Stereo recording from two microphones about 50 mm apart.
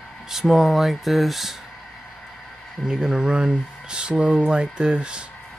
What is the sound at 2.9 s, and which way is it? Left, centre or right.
Speech, centre.